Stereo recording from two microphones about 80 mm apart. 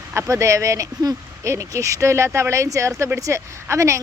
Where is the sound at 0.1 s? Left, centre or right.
Right.